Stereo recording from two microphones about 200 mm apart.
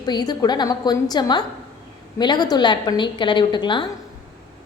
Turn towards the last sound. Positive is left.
turn(degrees=25)  # may be behind; listen again after turning